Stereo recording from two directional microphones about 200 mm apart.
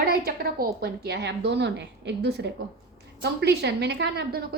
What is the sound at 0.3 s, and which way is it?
A woman's voice, 50° right (ahead or behind).